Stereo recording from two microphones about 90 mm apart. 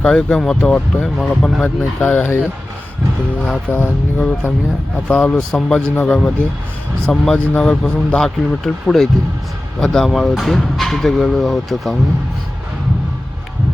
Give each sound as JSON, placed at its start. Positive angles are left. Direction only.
{"t": 0.0, "sound": "speech", "side_deg": 10}
{"t": 0.6, "sound": "speech", "side_deg": 15}
{"t": 1.0, "sound": "speech", "side_deg": 0}
{"t": 2.0, "sound": "speech", "side_deg": 20}
{"t": 3.7, "sound": "speech", "side_deg": 20}